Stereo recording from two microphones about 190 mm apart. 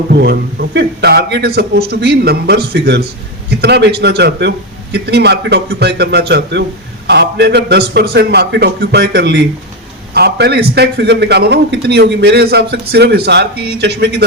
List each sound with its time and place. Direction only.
0.1 s a man's voice: 55° right (ahead or behind)